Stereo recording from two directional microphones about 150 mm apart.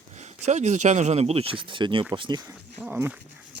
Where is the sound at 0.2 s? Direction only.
50° right (ahead or behind); by 2.5 s 30° right (ahead or behind).